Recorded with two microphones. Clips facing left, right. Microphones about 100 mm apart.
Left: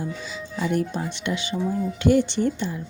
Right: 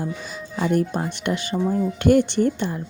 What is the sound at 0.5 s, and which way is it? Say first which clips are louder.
Speech: right 3 dB; 50° right (ahead or behind).